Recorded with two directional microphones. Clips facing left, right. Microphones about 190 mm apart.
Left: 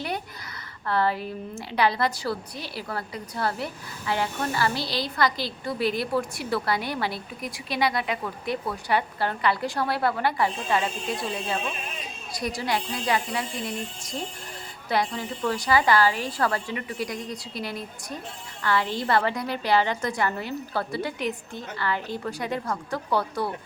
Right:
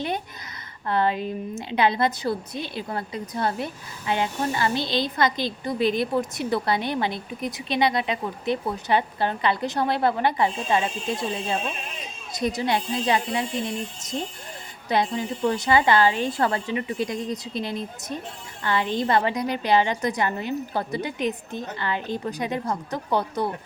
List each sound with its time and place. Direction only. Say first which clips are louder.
0.9 s a woman's voice: right 2 dB; 20° right (ahead or behind)